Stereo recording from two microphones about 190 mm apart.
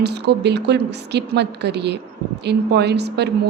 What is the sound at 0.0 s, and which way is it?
A woman's voice, 60° right (ahead or behind).